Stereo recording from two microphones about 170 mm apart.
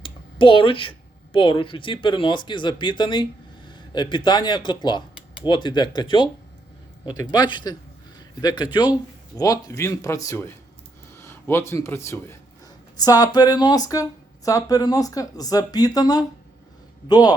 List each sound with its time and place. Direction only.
0.0 s speech: 30° left (ahead or behind)